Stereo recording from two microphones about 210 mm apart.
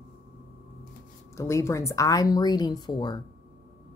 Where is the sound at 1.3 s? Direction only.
15° left (ahead or behind).